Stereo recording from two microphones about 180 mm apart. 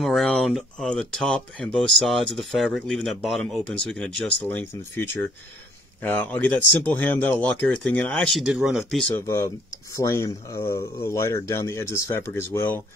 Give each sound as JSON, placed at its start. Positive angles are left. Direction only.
{"t": 0.0, "sound": "speech", "side_deg": 0}
{"t": 9.1, "sound": "speech", "side_deg": 15}